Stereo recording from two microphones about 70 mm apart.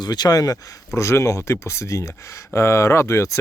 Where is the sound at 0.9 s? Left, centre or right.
Left.